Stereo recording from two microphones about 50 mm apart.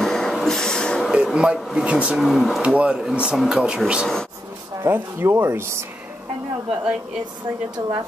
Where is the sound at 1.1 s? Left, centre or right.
Centre.